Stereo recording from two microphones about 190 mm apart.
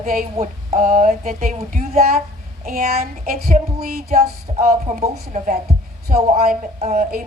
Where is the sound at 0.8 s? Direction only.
45° right (ahead or behind).